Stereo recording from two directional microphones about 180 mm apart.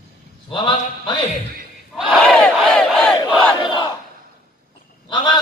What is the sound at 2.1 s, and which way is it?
Crowd, 5° left (ahead or behind).